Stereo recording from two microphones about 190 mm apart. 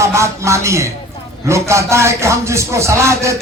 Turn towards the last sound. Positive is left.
turn(degrees=-15)  # may be behind; listen again after turning